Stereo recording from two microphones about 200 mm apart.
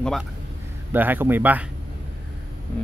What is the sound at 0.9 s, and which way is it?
Speech, 10° right (ahead or behind).